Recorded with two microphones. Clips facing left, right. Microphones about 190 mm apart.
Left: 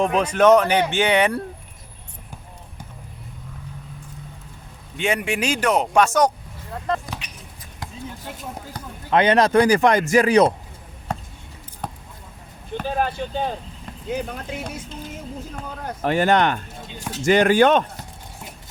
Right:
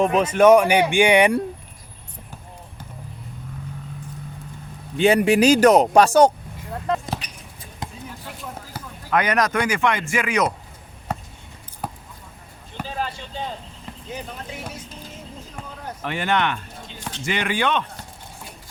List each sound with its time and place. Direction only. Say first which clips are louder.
0.0 s speech: right 2 dB; 5° right (ahead or behind)
4.9 s speech: right 7 dB; 35° right (ahead or behind)
7.2 s a sound: even; 40° right (ahead or behind)
9.0 s speech: left 4 dB; 25° left (ahead or behind)
11.1 s a sound: even; 5° right (ahead or behind)
12.8 s speech: left 5 dB; 55° left (ahead or behind)
16.0 s speech: left 5 dB; 40° left (ahead or behind)